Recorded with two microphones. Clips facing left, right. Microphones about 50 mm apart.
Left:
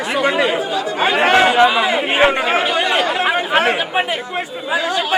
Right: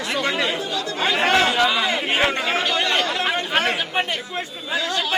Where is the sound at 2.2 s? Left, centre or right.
Left.